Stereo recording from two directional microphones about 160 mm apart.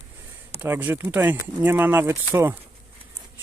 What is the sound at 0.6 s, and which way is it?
Speech, 10° right (ahead or behind).